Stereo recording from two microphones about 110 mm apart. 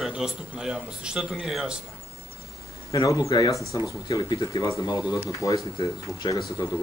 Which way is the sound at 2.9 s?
30° left (ahead or behind).